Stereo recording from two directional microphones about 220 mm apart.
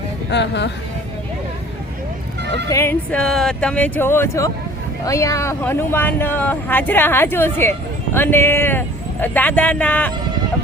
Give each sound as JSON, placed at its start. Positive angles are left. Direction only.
{"t": 0.3, "sound": "speech", "side_deg": 50}
{"t": 2.4, "sound": "music", "side_deg": -50}
{"t": 2.6, "sound": "speech", "side_deg": 10}